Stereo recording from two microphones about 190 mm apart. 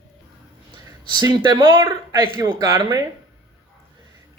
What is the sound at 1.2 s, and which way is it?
Speech, 20° right (ahead or behind).